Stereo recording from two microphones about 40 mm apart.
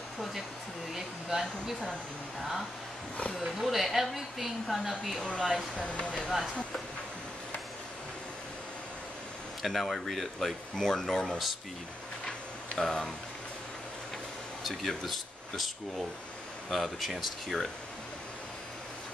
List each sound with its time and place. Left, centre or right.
3.5 s speech: centre
5.8 s speech: left
6.2 s speech: centre
9.6 s speech: centre
12.3 s tick-tock: centre
14.6 s speech: centre